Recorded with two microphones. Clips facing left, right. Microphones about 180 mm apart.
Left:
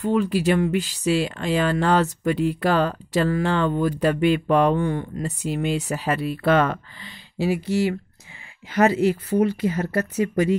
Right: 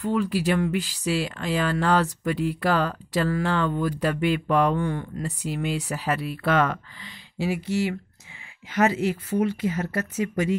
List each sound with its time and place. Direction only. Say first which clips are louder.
0.0 s speech: left 3 dB; 25° left (ahead or behind)